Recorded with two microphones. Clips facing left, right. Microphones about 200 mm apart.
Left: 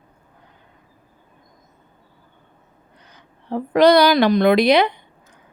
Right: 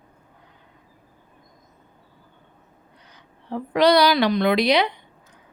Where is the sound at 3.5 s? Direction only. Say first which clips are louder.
Left 4 dB; 45° left (ahead or behind).